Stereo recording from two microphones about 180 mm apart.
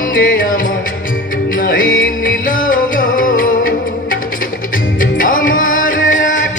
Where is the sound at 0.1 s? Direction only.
50° left (ahead or behind).